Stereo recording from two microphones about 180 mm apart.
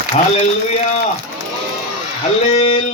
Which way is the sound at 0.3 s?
35° left (ahead or behind).